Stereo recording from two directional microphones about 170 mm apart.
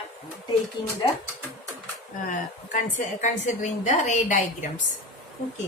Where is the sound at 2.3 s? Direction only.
45° left (ahead or behind).